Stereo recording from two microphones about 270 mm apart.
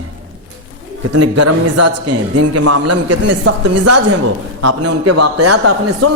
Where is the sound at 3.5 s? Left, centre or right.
Right.